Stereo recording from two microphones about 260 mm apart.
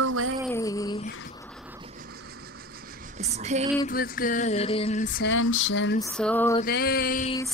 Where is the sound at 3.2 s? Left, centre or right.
Right.